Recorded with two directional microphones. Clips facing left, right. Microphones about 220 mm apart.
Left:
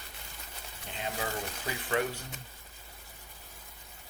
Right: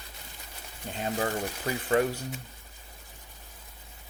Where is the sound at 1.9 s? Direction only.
40° right (ahead or behind).